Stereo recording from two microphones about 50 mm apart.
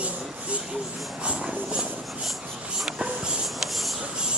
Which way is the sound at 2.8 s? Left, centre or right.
Centre.